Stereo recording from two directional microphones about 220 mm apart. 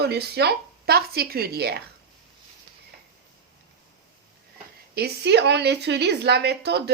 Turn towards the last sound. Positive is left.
turn(degrees=-50)  # may be behind; listen again after turning